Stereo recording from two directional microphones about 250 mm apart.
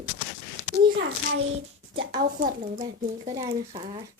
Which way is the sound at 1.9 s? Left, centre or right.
Right.